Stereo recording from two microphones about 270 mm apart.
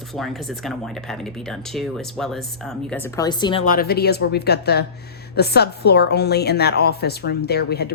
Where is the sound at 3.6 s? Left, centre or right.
Left.